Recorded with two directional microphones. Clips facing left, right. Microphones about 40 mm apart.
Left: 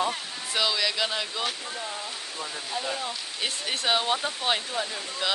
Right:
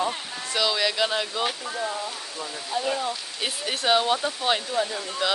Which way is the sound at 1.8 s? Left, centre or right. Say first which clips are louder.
Right 6 dB; right.